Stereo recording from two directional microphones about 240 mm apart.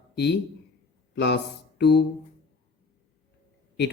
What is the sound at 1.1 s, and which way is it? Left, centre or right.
Speech, left.